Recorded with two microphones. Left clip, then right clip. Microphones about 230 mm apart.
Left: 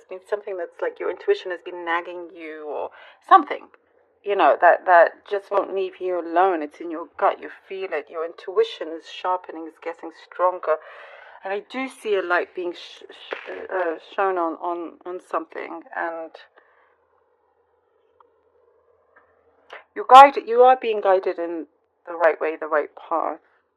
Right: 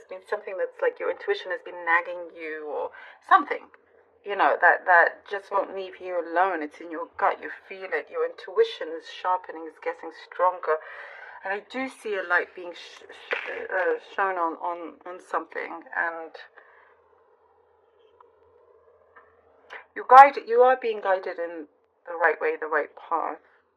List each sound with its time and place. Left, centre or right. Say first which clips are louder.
0.1 s speech: left 4 dB; left
19.7 s speech: left 3 dB; left